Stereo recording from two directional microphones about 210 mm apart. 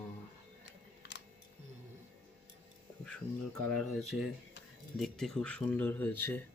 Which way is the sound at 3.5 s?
Centre (ahead or behind).